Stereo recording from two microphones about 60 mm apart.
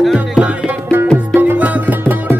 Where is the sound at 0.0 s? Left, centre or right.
Centre.